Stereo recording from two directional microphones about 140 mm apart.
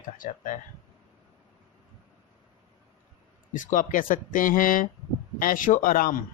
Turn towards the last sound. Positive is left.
turn(degrees=90)